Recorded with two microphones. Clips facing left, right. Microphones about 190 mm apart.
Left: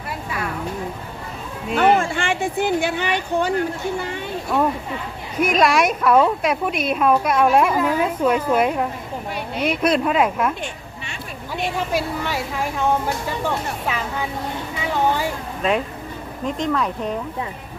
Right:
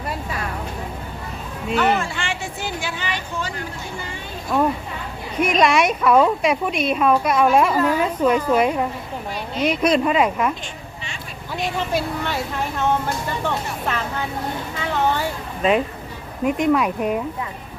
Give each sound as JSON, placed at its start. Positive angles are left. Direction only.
{"t": 1.7, "sound": "speech", "side_deg": 50}
{"t": 5.4, "sound": "speech", "side_deg": 5}
{"t": 11.9, "sound": "a woman's voice", "side_deg": 5}
{"t": 15.6, "sound": "speech", "side_deg": 0}
{"t": 16.4, "sound": "speech", "side_deg": -10}